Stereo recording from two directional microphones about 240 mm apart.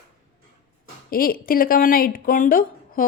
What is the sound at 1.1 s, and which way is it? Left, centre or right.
Speech, left.